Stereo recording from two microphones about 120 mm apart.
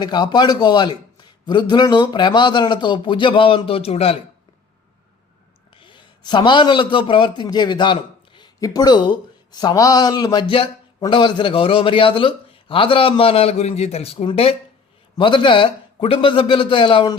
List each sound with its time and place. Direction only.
0.0 s a man's voice: 40° left (ahead or behind); by 4.2 s 55° left (ahead or behind)
5.7 s a man's voice: 45° left (ahead or behind)
7.4 s a man's voice: 35° left (ahead or behind)